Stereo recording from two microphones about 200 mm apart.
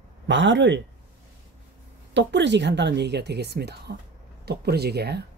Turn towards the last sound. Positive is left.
turn(degrees=-55)  # may be behind; listen again after turning